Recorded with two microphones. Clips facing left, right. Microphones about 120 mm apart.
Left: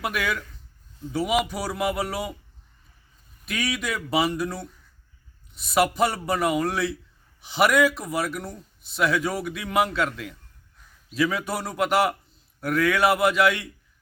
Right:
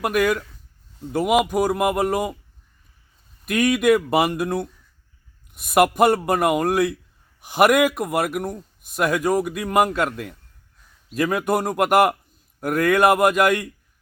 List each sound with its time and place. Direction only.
0.0 s speech: 45° right (ahead or behind)
3.4 s speech: 50° right (ahead or behind)